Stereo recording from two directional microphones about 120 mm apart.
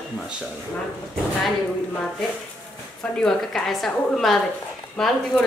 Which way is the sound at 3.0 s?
5° left (ahead or behind).